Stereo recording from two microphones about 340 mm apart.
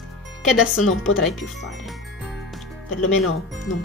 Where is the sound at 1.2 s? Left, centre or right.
Centre.